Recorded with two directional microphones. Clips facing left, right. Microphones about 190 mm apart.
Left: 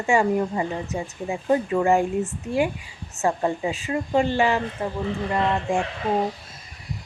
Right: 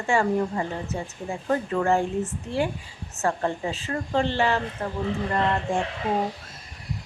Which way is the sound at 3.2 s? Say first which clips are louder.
Left 3 dB; 15° left (ahead or behind).